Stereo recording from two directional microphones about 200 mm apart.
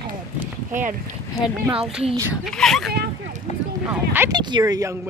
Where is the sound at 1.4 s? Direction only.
20° left (ahead or behind).